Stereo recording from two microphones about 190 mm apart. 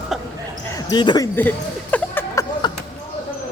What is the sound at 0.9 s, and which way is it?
Music, 20° left (ahead or behind).